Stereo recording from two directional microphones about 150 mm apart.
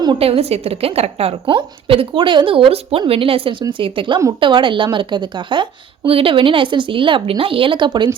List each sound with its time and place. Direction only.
0.0 s a woman's voice: 35° right (ahead or behind)